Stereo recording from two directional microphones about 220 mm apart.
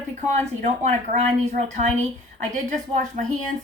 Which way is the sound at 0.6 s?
30° right (ahead or behind).